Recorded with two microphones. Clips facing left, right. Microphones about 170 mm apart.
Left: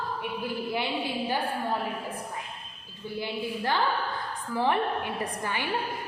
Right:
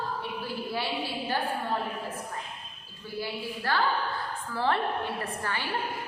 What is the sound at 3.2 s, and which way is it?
A woman's voice, 20° left (ahead or behind).